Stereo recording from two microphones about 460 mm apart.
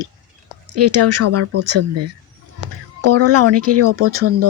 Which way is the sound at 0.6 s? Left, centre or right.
Right.